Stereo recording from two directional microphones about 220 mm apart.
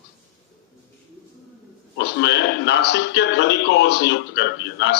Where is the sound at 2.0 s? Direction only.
50° left (ahead or behind).